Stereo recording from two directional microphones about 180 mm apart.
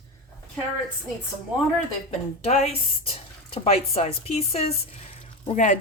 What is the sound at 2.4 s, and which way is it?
Speech, 35° left (ahead or behind).